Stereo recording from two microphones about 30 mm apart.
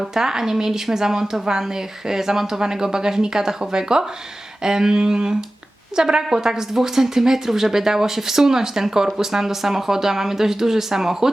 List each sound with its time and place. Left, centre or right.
0.1 s speech: centre